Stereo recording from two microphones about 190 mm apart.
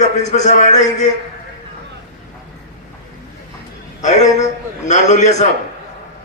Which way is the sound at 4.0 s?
40° left (ahead or behind).